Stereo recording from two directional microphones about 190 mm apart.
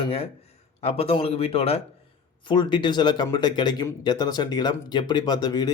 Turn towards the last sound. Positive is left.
turn(degrees=20)  # may be behind; listen again after turning